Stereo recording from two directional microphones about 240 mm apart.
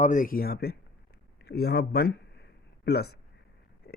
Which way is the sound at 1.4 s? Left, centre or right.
Left.